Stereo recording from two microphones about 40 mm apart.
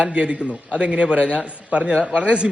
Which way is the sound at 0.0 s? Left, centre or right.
Right.